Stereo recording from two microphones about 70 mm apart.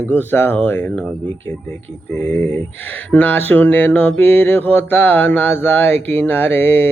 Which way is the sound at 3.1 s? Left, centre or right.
Left.